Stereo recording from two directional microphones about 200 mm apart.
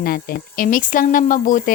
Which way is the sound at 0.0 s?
50° left (ahead or behind).